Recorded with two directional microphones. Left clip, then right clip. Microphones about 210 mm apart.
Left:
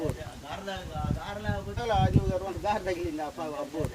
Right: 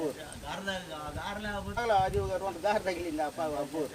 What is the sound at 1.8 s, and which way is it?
Speech, 5° right (ahead or behind).